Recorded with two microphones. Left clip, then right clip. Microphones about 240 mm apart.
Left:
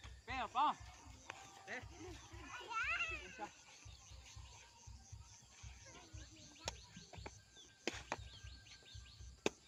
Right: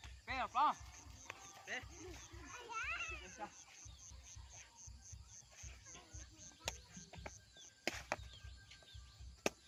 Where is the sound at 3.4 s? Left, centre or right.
Centre.